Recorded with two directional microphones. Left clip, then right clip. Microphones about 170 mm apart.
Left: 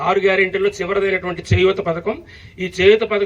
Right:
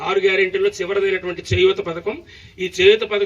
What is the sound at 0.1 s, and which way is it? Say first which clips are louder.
A man's voice: left 1 dB; 30° right (ahead or behind).